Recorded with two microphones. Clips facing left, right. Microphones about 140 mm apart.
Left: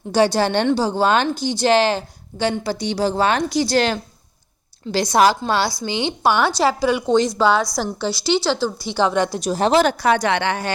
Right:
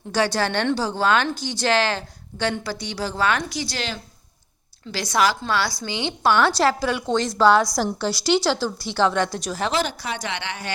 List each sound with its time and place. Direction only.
0.1 s a woman's voice: 15° left (ahead or behind); by 3.8 s 40° left (ahead or behind)
5.3 s a woman's voice: 25° left (ahead or behind)
6.6 s a woman's voice: centre (ahead or behind)
7.0 s a woman's voice: 15° left (ahead or behind)
7.5 s a woman's voice: 5° right (ahead or behind)
9.6 s a woman's voice: 60° left (ahead or behind)